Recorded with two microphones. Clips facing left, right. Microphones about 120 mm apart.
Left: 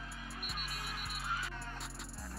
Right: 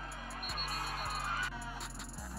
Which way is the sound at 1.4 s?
Centre (ahead or behind).